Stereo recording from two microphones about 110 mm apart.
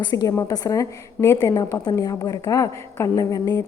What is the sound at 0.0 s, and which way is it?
A woman's voice, 40° left (ahead or behind).